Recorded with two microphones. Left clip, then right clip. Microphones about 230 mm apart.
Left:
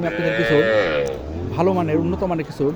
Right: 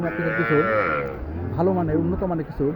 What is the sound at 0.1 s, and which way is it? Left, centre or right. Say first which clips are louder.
Speech: left 4 dB; centre.